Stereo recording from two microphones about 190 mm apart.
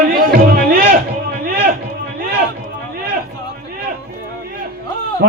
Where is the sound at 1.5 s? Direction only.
50° right (ahead or behind).